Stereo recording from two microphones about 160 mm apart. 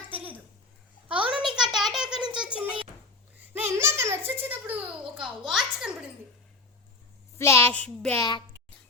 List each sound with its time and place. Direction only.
0.1 s a sound: 10° right (ahead or behind)
7.3 s a child's voice: 15° left (ahead or behind)
8.2 s a child's voice: 30° left (ahead or behind)